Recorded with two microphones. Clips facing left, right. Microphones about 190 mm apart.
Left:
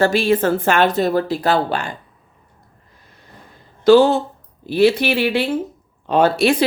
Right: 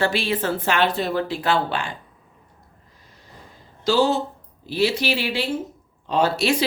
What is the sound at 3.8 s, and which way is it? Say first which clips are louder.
A woman's voice: left 8 dB; 55° left (ahead or behind).